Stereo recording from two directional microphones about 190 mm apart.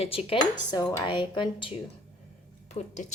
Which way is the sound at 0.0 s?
30° left (ahead or behind).